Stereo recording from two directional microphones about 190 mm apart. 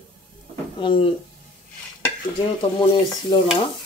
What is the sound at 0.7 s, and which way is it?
Speech, 25° left (ahead or behind).